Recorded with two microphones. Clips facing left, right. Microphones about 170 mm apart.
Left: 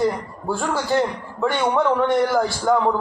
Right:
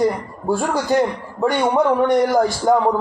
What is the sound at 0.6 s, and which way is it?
A man's voice, 15° right (ahead or behind).